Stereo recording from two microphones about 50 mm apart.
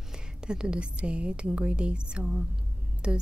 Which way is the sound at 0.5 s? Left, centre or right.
Centre.